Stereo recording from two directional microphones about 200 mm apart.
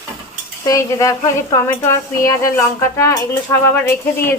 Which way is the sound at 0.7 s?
15° left (ahead or behind).